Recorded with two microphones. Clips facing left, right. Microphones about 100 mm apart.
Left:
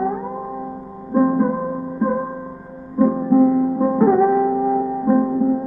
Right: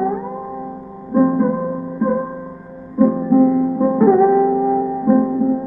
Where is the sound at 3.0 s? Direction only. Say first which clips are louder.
Right 2 dB; 15° left (ahead or behind).